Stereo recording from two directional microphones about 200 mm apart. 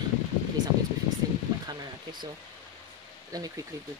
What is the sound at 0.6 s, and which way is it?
Speech, 20° right (ahead or behind).